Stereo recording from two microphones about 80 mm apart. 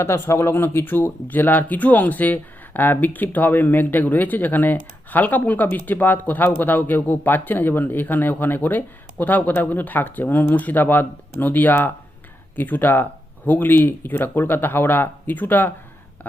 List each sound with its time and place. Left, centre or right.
0.0 s speech: left